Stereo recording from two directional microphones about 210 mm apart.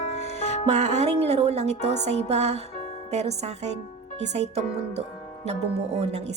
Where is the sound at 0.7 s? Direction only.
30° right (ahead or behind).